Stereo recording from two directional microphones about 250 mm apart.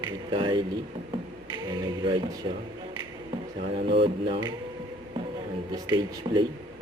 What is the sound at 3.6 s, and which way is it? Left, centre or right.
Speech, right.